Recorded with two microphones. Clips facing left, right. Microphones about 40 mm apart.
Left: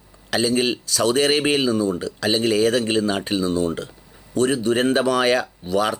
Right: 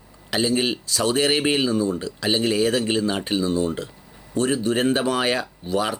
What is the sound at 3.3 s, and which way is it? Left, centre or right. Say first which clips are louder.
Speech: left 1 dB; right.